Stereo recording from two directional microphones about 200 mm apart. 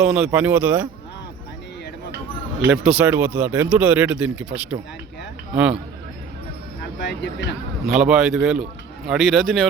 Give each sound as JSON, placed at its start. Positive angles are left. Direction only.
{"t": 0.0, "sound": "speech", "side_deg": -5}
{"t": 2.8, "sound": "speech", "side_deg": -5}
{"t": 7.0, "sound": "speech", "side_deg": 60}
{"t": 8.0, "sound": "speech", "side_deg": 0}